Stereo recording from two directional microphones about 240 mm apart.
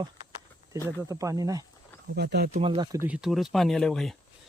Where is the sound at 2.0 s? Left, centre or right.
Right.